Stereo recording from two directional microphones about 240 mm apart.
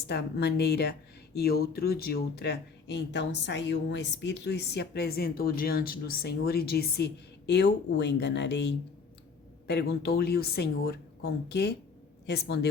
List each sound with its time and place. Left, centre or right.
0.1 s speech: left